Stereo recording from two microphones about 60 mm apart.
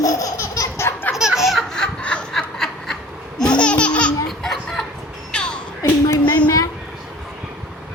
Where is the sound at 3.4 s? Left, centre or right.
Centre.